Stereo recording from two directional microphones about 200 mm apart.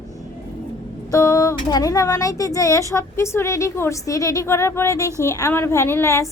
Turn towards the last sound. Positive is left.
turn(degrees=15)  # may be behind; listen again after turning